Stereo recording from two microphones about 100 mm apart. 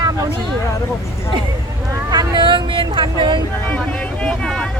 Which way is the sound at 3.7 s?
15° left (ahead or behind).